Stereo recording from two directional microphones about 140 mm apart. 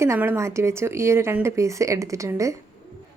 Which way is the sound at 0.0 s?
20° right (ahead or behind).